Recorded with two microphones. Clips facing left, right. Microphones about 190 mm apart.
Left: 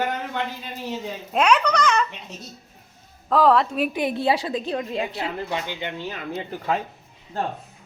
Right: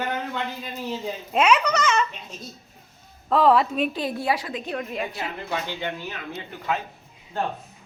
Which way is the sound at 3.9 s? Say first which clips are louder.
Left 3 dB; 20° left (ahead or behind).